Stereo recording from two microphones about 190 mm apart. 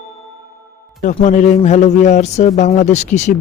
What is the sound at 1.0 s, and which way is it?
Speech, 40° left (ahead or behind).